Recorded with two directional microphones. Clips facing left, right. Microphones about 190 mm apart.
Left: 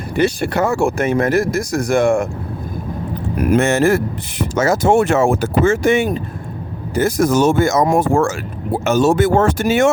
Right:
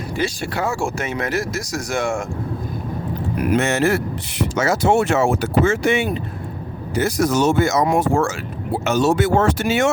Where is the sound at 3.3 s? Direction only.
50° left (ahead or behind).